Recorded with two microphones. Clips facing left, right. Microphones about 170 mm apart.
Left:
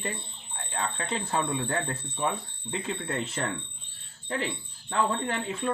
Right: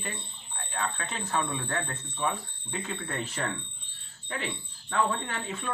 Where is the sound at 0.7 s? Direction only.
30° left (ahead or behind).